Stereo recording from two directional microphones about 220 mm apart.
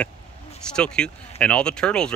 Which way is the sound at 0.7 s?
5° left (ahead or behind).